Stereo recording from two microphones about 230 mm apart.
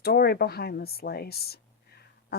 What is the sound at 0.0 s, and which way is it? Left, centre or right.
Speech, left.